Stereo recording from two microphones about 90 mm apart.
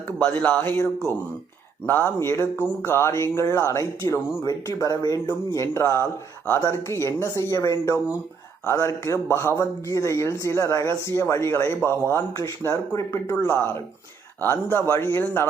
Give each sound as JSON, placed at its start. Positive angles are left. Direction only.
{"t": 0.3, "sound": "speech", "side_deg": 20}
{"t": 2.1, "sound": "speech", "side_deg": 30}
{"t": 5.7, "sound": "speech", "side_deg": 25}